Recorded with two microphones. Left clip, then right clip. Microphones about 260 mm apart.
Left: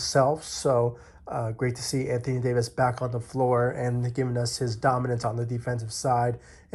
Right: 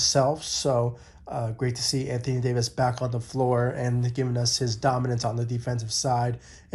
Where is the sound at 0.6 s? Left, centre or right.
Right.